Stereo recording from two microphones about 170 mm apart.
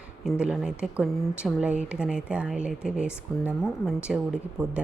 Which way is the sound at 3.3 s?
15° left (ahead or behind).